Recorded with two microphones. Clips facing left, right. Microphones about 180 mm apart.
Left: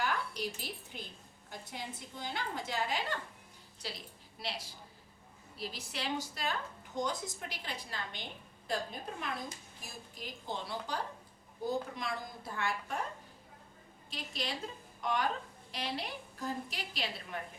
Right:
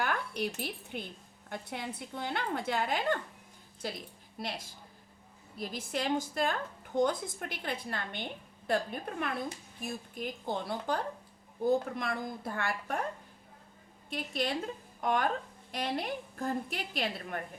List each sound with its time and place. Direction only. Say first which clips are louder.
0.0 s a woman's voice: right 3 dB; 55° right (ahead or behind)
14.1 s a woman's voice: right 7 dB; 55° right (ahead or behind)